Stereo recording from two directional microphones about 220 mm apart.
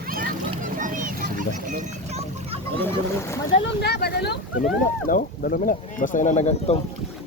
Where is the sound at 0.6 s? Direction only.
35° right (ahead or behind).